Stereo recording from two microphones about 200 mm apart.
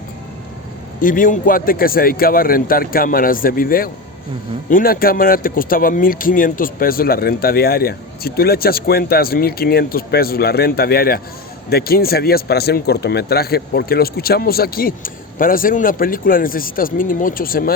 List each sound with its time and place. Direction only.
1.0 s speech: 45° left (ahead or behind)